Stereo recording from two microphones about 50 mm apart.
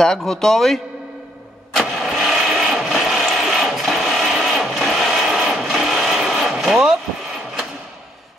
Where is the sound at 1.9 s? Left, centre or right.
Centre.